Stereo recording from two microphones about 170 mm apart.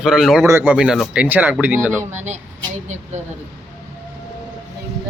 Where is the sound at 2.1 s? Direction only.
40° right (ahead or behind).